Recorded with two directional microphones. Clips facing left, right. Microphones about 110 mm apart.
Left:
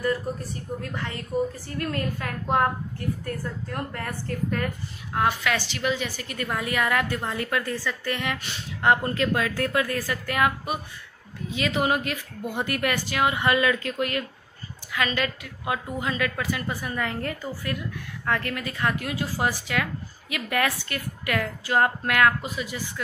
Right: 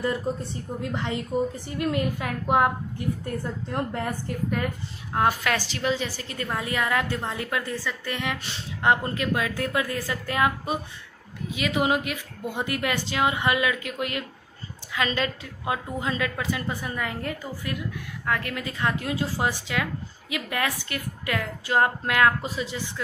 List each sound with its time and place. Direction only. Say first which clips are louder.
0.0 s a woman's voice: even; 25° right (ahead or behind)
5.4 s a woman's voice: even; 40° right (ahead or behind); by 10.8 s 25° right (ahead or behind)
11.5 s speech: even; 15° right (ahead or behind); by 23.0 s 30° right (ahead or behind)